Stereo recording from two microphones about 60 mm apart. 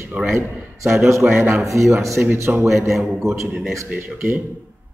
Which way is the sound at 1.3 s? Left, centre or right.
Right.